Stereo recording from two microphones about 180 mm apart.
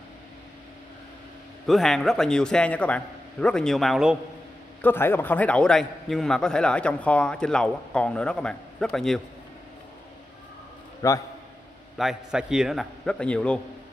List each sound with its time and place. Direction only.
1.7 s a man's voice: centre (ahead or behind)
4.8 s a man's voice: 10° left (ahead or behind)
11.0 s a man's voice: 15° left (ahead or behind)
12.0 s a man's voice: 5° right (ahead or behind)